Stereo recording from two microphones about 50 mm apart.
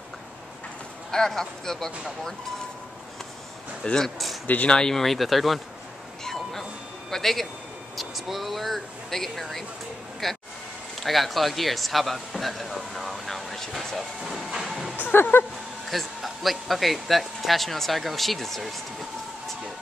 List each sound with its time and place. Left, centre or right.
1.1 s speech: centre
3.8 s speech: centre
6.2 s doorbell: centre
7.1 s speech: centre
12.7 s vehicle: centre
14.2 s speech: centre